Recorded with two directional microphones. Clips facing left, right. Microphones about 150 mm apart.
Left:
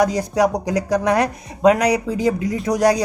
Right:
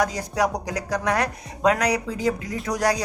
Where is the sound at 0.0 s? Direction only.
20° left (ahead or behind).